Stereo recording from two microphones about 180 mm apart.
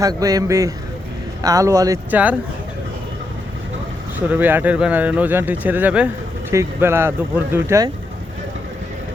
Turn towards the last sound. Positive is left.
turn(degrees=-15)  # may be behind; listen again after turning